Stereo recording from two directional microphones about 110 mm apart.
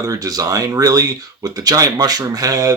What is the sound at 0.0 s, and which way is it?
Speech, 35° right (ahead or behind).